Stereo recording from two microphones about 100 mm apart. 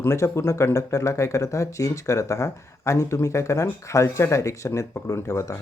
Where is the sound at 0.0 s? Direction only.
25° left (ahead or behind).